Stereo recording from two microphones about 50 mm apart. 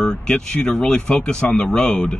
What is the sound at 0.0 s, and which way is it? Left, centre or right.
Speech, centre.